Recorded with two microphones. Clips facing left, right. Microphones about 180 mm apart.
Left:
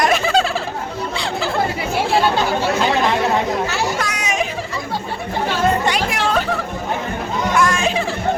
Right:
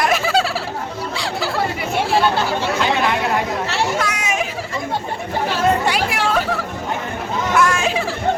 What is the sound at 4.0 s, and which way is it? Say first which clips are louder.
Children playing: even; 5° right (ahead or behind).